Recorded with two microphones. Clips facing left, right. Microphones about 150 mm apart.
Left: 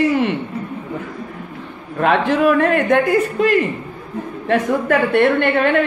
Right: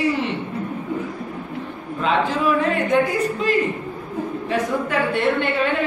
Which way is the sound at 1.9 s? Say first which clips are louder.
Left 5 dB; 60° left (ahead or behind).